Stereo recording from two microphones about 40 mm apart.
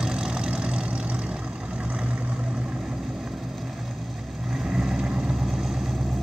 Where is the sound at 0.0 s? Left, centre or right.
Centre.